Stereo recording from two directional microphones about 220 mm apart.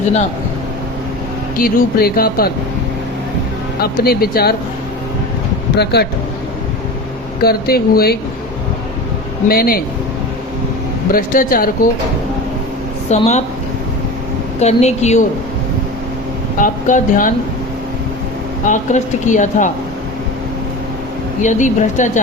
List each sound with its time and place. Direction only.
1.5 s speech: 45° left (ahead or behind)
3.8 s speech: 45° left (ahead or behind)
5.7 s speech: 50° left (ahead or behind)
7.4 s speech: 45° left (ahead or behind)
9.5 s speech: 40° left (ahead or behind)
11.1 s speech: 40° left (ahead or behind)
13.1 s a woman's voice: 30° left (ahead or behind)
14.6 s a woman's voice: 30° left (ahead or behind)
16.6 s speech: 35° left (ahead or behind)
18.6 s speech: 35° left (ahead or behind)
21.4 s speech: 35° left (ahead or behind)